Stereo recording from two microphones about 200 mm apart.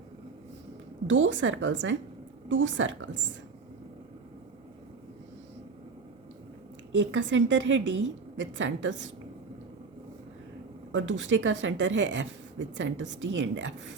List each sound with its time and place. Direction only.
1.0 s a woman's voice: 70° right (ahead or behind)
7.0 s a woman's voice: 65° right (ahead or behind)
10.9 s a woman's voice: 65° right (ahead or behind)